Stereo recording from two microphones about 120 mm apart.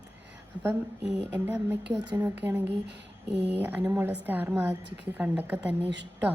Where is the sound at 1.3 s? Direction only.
15° right (ahead or behind).